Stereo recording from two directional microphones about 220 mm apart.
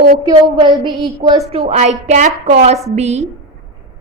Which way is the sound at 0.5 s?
20° right (ahead or behind).